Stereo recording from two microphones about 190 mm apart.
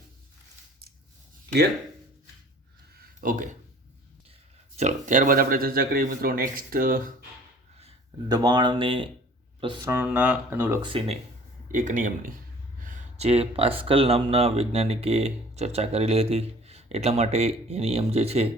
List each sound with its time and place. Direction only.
3.0 s a sound: 45° right (ahead or behind)
4.8 s speech: 40° right (ahead or behind)
8.3 s speech: 20° right (ahead or behind)
9.8 s speech: 10° right (ahead or behind)
10.8 s speech: 25° right (ahead or behind)
11.7 s speech: 45° right (ahead or behind)